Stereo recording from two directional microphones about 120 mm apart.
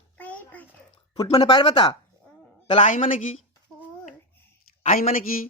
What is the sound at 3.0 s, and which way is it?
Speech, 90° left.